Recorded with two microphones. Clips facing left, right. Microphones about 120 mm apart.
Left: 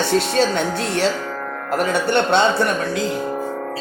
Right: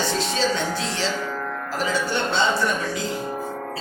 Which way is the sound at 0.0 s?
65° left (ahead or behind).